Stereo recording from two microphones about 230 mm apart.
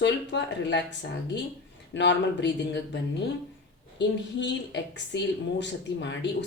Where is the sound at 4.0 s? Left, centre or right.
Left.